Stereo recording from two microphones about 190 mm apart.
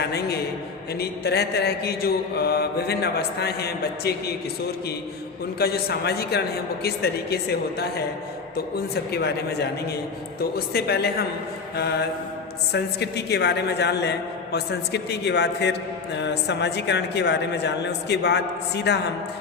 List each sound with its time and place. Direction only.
0.0 s a woman's voice: 60° left (ahead or behind)
0.9 s mantra: 55° left (ahead or behind)
5.5 s mantra: 55° left (ahead or behind)